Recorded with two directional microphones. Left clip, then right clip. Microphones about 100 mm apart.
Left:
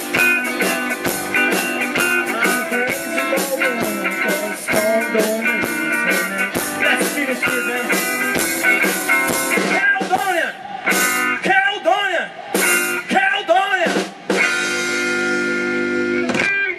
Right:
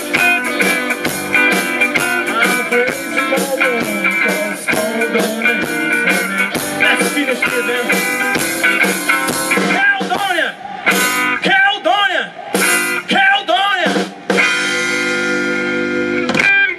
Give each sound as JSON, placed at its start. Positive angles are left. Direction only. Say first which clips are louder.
{"t": 0.2, "sound": "music", "louder": "right 2 dB", "side_deg": -20}
{"t": 8.3, "sound": "music", "louder": "even", "side_deg": -20}
{"t": 10.9, "sound": "music", "louder": "right 3 dB", "side_deg": -15}